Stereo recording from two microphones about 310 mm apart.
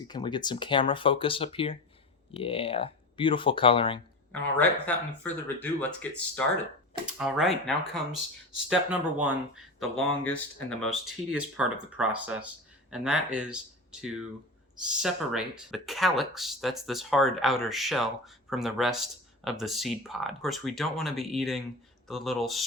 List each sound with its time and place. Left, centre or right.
0.1 s speech: centre
4.3 s speech: centre